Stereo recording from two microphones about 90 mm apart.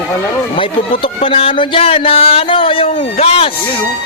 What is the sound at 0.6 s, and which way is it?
Speech, 80° left.